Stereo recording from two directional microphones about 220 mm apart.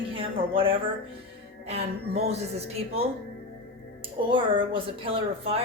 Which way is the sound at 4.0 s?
25° right (ahead or behind).